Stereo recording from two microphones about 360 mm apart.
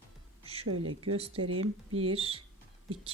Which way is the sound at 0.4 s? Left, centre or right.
Centre.